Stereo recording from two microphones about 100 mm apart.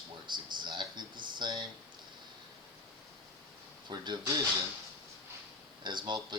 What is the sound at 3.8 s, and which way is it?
Speech, 45° right (ahead or behind).